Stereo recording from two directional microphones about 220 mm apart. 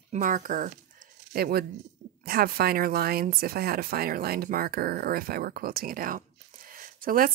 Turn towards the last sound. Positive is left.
turn(degrees=-40)  # may be behind; listen again after turning